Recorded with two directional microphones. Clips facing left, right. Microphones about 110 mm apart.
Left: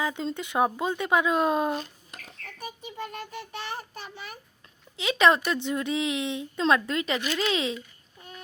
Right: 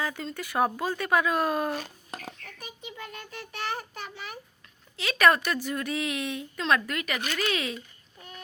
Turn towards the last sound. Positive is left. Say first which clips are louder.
# left 3 dB
turn(degrees=25)  # may be behind; listen again after turning